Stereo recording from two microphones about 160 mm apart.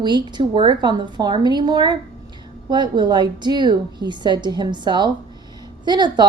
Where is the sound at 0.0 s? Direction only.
25° right (ahead or behind).